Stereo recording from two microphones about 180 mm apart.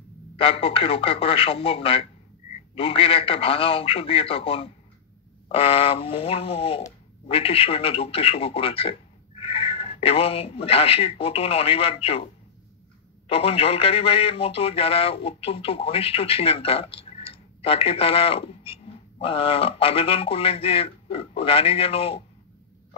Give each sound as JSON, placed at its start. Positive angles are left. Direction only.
{"t": 0.4, "sound": "speech", "side_deg": 30}
{"t": 13.3, "sound": "speech", "side_deg": 30}